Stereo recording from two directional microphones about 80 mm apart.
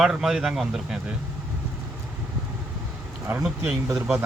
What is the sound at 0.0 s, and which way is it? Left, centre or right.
Speech, centre.